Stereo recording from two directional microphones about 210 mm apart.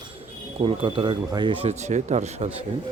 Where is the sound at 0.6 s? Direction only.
25° right (ahead or behind).